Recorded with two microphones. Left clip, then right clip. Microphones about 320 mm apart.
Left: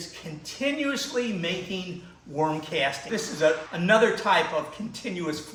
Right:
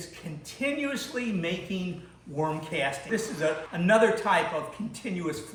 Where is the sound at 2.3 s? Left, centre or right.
Centre.